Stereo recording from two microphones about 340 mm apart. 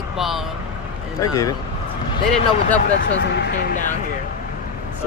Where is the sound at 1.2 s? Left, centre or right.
Centre.